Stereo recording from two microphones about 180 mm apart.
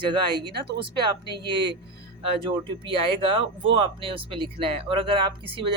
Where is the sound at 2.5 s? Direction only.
30° right (ahead or behind).